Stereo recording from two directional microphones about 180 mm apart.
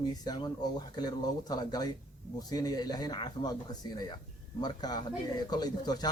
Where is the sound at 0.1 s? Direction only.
25° left (ahead or behind).